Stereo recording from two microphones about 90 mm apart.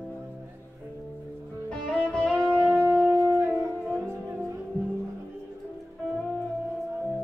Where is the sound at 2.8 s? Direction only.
25° right (ahead or behind).